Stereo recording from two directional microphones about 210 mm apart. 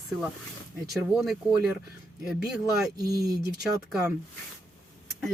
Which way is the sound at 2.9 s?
15° right (ahead or behind).